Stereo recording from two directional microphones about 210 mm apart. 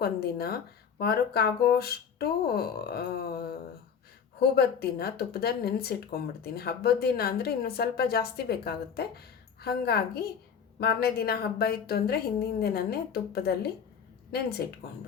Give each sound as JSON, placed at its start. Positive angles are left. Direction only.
{"t": 0.0, "sound": "speech", "side_deg": 45}
{"t": 4.4, "sound": "speech", "side_deg": 50}